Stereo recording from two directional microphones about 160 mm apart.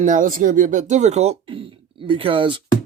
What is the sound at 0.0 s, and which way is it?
Speech, 55° right (ahead or behind).